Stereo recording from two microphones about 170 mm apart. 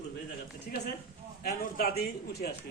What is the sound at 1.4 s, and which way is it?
A man's voice, 65° left (ahead or behind).